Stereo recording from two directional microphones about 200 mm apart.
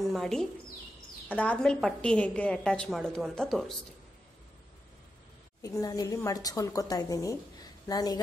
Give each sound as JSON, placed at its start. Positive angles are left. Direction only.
{"t": 0.0, "sound": "a sound", "side_deg": 0}
{"t": 1.3, "sound": "a woman's voice", "side_deg": 5}
{"t": 5.6, "sound": "a woman's voice", "side_deg": 15}